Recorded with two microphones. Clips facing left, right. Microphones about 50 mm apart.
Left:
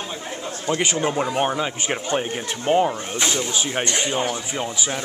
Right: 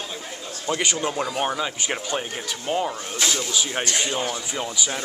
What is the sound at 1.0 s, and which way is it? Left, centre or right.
Speech, centre.